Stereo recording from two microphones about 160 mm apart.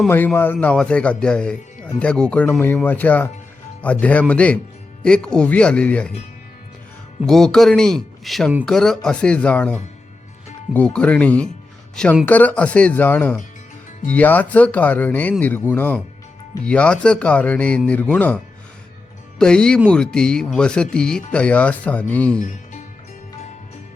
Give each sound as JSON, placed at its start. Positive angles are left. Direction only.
{"t": 0.3, "sound": "speech", "side_deg": 10}
{"t": 7.3, "sound": "speech", "side_deg": 5}
{"t": 10.8, "sound": "speech", "side_deg": 5}
{"t": 19.4, "sound": "speech", "side_deg": 5}